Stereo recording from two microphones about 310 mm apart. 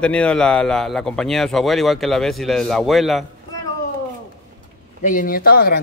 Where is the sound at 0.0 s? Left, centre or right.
Centre.